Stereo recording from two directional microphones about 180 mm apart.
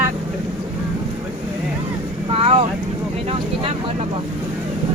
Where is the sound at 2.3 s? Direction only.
35° right (ahead or behind).